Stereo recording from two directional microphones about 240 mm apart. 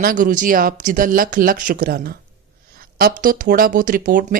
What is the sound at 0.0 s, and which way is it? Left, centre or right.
Speech, right.